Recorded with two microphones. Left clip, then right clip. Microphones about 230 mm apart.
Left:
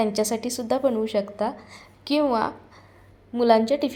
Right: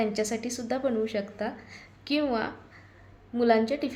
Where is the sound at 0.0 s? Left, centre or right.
Centre.